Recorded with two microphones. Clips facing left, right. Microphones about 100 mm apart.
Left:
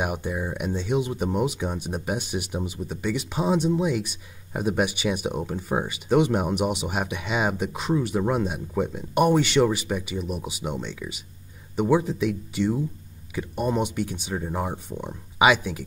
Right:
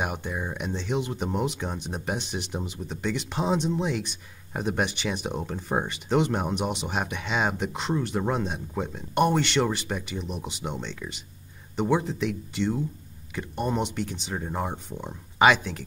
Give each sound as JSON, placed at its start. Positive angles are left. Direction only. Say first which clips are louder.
{"t": 0.0, "sound": "speech", "louder": "left 3 dB", "side_deg": 10}